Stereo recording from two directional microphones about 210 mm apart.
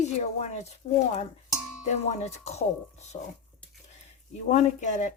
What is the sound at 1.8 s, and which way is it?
Speech, 30° left (ahead or behind).